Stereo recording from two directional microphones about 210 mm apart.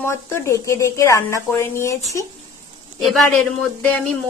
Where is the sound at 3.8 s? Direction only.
10° left (ahead or behind).